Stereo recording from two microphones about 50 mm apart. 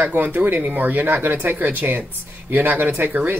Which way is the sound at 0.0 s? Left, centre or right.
Right.